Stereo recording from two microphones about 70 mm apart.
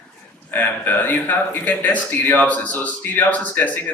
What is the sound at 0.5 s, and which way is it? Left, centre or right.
Speech, left.